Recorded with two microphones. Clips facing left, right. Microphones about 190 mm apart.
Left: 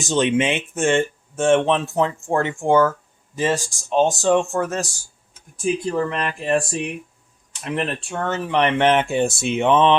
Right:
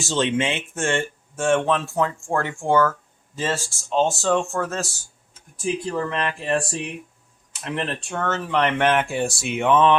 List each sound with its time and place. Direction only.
0.0 s speech: 15° left (ahead or behind)